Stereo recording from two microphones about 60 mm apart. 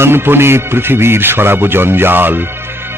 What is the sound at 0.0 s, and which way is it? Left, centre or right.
Speech, right.